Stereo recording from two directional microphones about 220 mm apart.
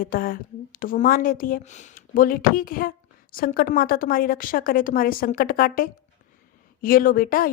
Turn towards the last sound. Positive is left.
turn(degrees=40)  # may be behind; listen again after turning